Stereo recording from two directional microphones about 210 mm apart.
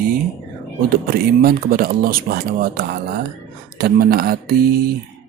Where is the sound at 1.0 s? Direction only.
45° right (ahead or behind).